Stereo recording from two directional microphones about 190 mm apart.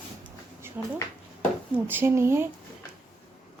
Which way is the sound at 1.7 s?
10° right (ahead or behind).